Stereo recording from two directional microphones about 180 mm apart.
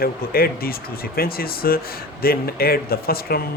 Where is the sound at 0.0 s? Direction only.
55° left (ahead or behind).